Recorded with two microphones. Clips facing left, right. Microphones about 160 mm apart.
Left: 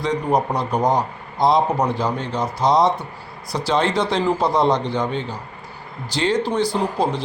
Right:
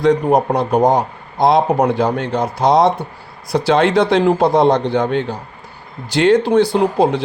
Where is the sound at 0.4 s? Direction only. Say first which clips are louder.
Right 6 dB; 55° right (ahead or behind).